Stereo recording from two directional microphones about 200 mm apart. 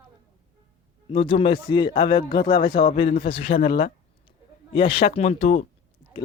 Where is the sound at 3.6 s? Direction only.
45° left (ahead or behind).